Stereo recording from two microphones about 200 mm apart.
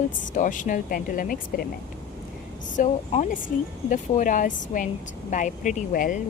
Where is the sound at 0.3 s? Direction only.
40° left (ahead or behind).